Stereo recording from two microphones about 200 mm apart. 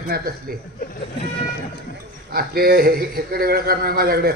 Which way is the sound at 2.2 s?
50° right (ahead or behind).